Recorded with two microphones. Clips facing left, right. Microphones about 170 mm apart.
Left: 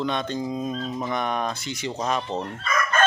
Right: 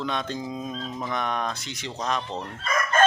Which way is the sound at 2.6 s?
35° right (ahead or behind).